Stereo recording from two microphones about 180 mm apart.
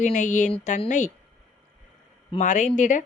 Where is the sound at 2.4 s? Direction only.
45° left (ahead or behind).